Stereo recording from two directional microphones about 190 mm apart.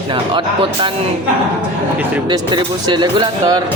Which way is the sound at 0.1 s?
25° right (ahead or behind).